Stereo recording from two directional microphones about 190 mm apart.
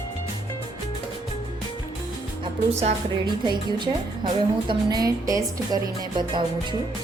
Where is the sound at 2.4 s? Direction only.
35° right (ahead or behind).